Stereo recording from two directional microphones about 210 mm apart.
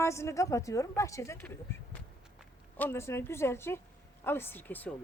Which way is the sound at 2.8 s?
10° left (ahead or behind).